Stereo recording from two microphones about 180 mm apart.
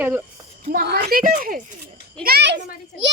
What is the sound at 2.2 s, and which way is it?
Speech, 65° right (ahead or behind).